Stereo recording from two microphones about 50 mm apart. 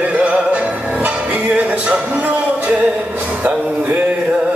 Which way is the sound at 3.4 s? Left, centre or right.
Right.